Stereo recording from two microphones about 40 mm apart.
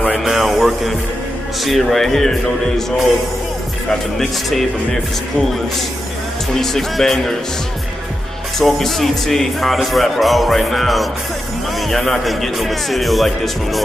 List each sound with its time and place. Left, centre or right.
0.2 s music: centre
1.6 s speech: centre
4.2 s speech: centre
6.6 s speech: centre
8.5 s speech: centre